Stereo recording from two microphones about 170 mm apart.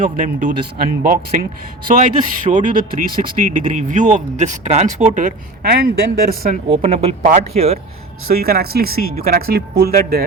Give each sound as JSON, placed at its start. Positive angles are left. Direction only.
{"t": 0.0, "sound": "speech", "side_deg": -55}
{"t": 5.7, "sound": "speech", "side_deg": -65}
{"t": 6.7, "sound": "speech", "side_deg": -35}
{"t": 8.4, "sound": "speech", "side_deg": -65}